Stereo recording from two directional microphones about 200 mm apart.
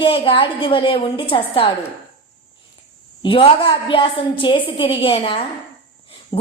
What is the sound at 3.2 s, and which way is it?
A woman's voice, 25° left (ahead or behind).